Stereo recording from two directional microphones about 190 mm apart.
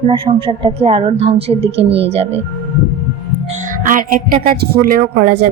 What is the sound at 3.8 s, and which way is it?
A woman's voice, 45° right (ahead or behind).